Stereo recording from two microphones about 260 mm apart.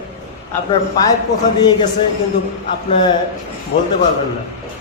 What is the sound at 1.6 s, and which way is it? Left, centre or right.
Speech, centre.